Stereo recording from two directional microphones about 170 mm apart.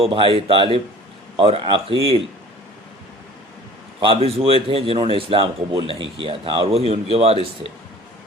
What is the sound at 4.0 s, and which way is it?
Speech, 35° right (ahead or behind).